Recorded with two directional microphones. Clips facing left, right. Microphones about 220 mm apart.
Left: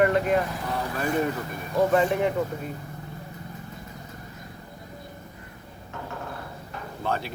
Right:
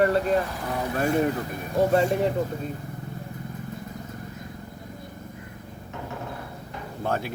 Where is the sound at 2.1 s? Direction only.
35° right (ahead or behind).